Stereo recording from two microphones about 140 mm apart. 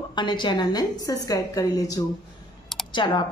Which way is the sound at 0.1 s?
35° left (ahead or behind).